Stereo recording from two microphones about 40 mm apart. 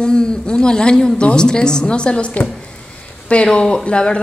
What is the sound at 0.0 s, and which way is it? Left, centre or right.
A woman's voice, centre.